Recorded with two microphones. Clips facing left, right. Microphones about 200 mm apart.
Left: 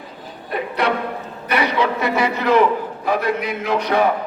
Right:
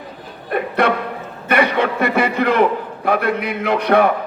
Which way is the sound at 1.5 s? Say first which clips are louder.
Right 3 dB; 55° right (ahead or behind).